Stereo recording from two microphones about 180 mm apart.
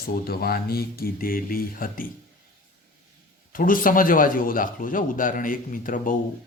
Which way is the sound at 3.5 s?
50° left (ahead or behind).